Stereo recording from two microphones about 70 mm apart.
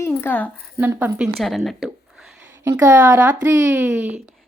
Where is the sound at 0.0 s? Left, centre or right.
Left.